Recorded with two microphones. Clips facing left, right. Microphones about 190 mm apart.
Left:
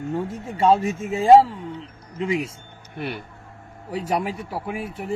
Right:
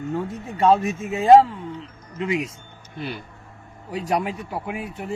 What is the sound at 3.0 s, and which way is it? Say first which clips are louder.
Speech: left 1 dB; 60° left (ahead or behind).